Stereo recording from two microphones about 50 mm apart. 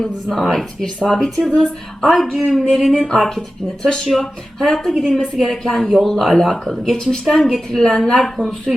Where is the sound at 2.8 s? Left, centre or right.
Centre.